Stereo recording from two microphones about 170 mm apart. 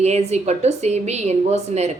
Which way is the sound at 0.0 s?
40° right (ahead or behind).